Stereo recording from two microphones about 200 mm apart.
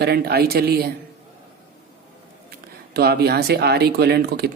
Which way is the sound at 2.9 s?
55° right (ahead or behind).